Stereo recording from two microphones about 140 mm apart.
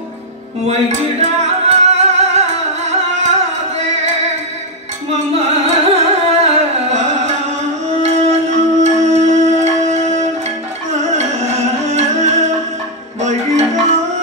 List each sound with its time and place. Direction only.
1.2 s music: 50° right (ahead or behind)
5.7 s music: 50° right (ahead or behind)